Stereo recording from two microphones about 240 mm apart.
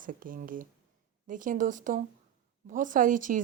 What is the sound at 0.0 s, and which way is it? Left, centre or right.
A woman's voice, right.